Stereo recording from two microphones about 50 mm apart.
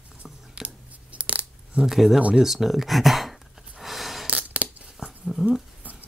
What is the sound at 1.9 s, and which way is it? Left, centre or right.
Speech, centre.